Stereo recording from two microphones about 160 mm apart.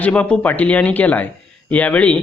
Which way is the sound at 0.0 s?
10° left (ahead or behind).